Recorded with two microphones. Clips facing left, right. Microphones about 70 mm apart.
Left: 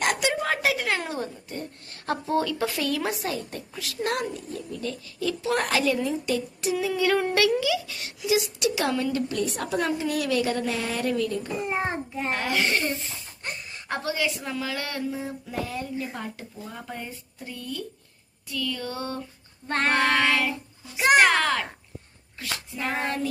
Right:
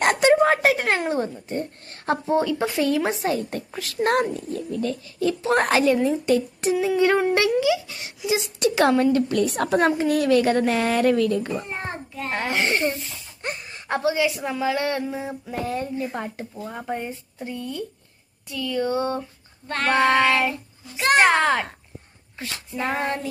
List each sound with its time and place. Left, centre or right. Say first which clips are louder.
0.0 s a sound: right 8 dB; right
1.0 s a woman's voice: right 7 dB; right
2.2 s speech: right 3 dB; right
6.8 s a woman's voice: right 4 dB; right
11.7 s a child's voice: left 4 dB; centre
12.3 s speech: right 2 dB; right
15.6 s speech: right 8 dB; right
19.6 s a child's voice: even; left
19.9 s speech: right 5 dB; right
20.9 s a child's voice: even; centre
21.2 s speech: right 6 dB; right